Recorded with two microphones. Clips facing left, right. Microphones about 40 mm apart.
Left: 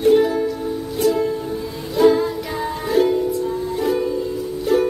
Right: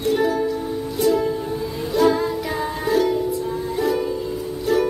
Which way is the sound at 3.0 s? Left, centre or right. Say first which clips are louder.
Left 4 dB; left.